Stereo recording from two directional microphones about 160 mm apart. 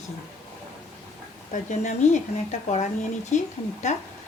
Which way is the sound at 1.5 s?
50° left (ahead or behind).